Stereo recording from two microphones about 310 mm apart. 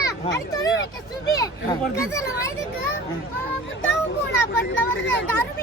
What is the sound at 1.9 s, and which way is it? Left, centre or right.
Speech, centre.